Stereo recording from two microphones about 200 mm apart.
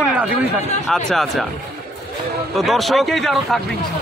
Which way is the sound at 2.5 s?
Centre (ahead or behind).